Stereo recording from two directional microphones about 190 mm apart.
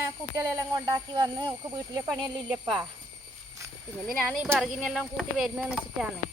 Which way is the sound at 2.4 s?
5° right (ahead or behind).